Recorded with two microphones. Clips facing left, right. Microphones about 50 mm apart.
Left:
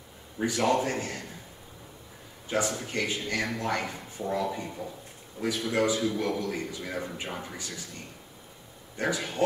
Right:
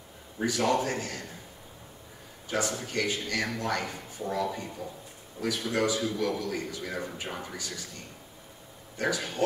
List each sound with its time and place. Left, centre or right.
0.5 s a man's voice: left
2.5 s a man's voice: left
6.8 s speech: centre
7.5 s a man's voice: left
8.9 s a man's voice: left